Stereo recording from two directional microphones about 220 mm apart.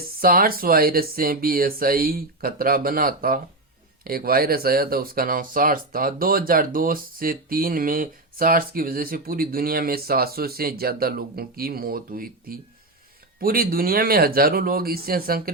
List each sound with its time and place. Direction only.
0.2 s speech: 40° right (ahead or behind)